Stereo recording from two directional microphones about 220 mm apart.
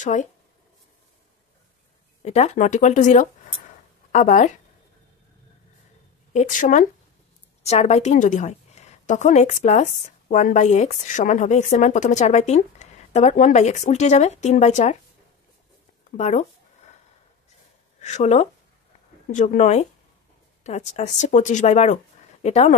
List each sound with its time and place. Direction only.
0.0 s a woman's voice: 35° left (ahead or behind)
2.2 s a woman's voice: 30° left (ahead or behind)
6.3 s a woman's voice: 35° left (ahead or behind)
16.2 s a woman's voice: 30° left (ahead or behind)
18.0 s a woman's voice: 35° left (ahead or behind)